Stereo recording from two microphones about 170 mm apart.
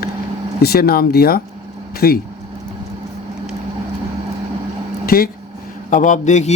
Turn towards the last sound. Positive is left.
turn(degrees=45)  # may be behind; listen again after turning